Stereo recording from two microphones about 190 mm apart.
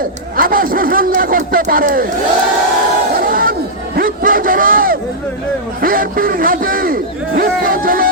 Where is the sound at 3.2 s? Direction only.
50° right (ahead or behind).